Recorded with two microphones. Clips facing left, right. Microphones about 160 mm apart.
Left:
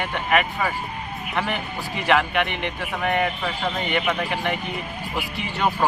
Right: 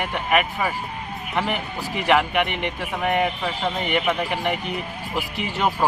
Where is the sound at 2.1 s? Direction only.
10° right (ahead or behind).